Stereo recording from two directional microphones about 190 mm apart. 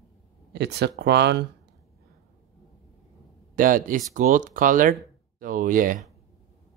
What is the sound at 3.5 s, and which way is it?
Speech, 45° right (ahead or behind).